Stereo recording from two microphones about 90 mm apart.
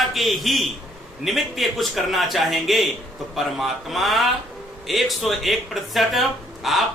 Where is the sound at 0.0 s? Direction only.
Centre (ahead or behind).